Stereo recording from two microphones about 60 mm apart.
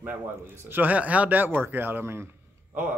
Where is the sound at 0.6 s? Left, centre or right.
Right.